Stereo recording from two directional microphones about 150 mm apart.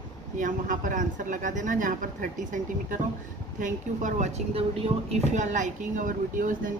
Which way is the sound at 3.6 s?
55° right (ahead or behind).